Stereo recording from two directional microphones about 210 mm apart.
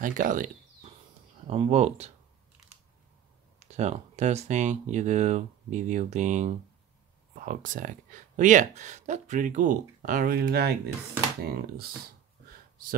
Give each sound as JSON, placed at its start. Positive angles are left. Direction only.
{"t": 0.0, "sound": "speech", "side_deg": -40}
{"t": 1.5, "sound": "speech", "side_deg": -30}
{"t": 3.5, "sound": "speech", "side_deg": -30}